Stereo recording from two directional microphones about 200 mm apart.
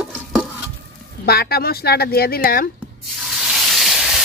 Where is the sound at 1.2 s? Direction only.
50° left (ahead or behind).